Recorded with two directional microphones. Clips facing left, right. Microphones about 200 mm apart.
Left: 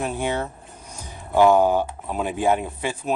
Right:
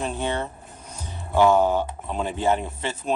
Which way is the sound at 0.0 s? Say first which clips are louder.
Left 2 dB; 10° left (ahead or behind).